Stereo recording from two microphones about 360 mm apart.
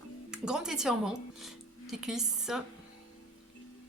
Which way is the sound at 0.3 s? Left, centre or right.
Centre.